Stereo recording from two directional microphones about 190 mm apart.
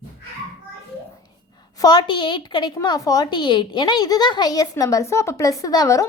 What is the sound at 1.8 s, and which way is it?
A woman's voice, 20° left (ahead or behind).